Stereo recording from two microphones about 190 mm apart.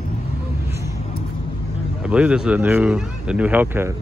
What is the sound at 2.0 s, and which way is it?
A man's voice, 5° right (ahead or behind).